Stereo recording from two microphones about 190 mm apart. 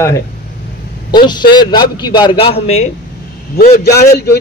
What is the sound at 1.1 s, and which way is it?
A man's voice, 25° left (ahead or behind).